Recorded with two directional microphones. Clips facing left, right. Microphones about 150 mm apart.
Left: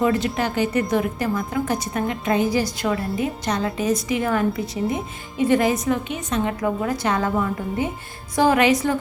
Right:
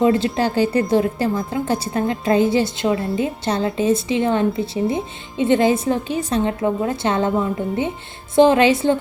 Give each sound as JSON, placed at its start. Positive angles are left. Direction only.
{"t": 0.0, "sound": "a woman's voice", "side_deg": -30}